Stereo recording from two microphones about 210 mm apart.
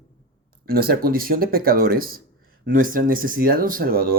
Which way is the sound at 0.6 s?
45° right (ahead or behind).